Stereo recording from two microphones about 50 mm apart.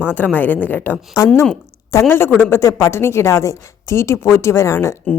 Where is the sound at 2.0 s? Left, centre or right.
Left.